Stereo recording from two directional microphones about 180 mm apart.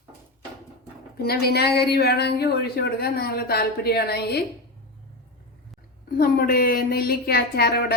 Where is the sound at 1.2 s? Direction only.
60° left (ahead or behind).